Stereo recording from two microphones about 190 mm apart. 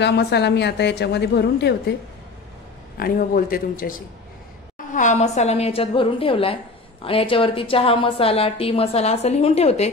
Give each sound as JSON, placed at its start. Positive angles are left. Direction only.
{"t": 0.0, "sound": "a woman's voice", "side_deg": 60}
{"t": 3.0, "sound": "a woman's voice", "side_deg": 50}